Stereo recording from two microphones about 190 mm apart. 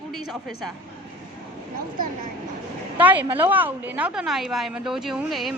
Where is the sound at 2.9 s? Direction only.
10° right (ahead or behind).